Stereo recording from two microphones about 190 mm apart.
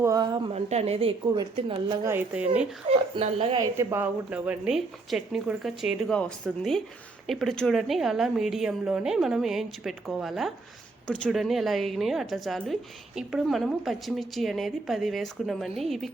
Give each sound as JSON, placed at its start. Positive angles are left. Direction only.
{"t": 0.0, "sound": "speech", "side_deg": -20}
{"t": 0.5, "sound": "a woman's voice", "side_deg": -35}
{"t": 2.0, "sound": "speech", "side_deg": -10}
{"t": 2.9, "sound": "speech", "side_deg": -30}
{"t": 3.6, "sound": "a woman's voice", "side_deg": -15}